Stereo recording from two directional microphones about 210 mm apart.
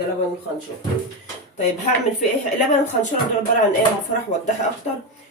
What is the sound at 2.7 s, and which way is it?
Speech, 35° left (ahead or behind).